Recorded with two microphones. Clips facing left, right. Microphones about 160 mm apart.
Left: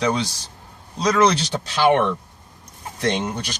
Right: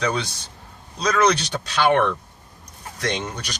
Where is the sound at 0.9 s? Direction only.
25° left (ahead or behind).